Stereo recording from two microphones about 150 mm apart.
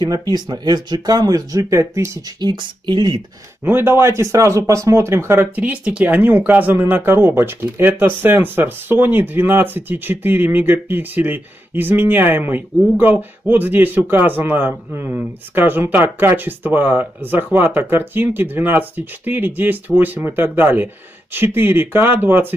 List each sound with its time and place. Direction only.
0.0 s speech: 25° right (ahead or behind)
3.6 s speech: 15° right (ahead or behind)